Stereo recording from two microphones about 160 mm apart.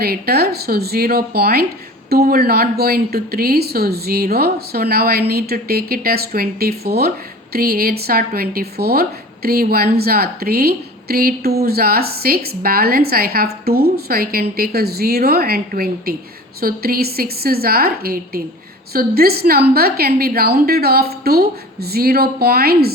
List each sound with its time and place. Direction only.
0.0 s speech: 75° right (ahead or behind)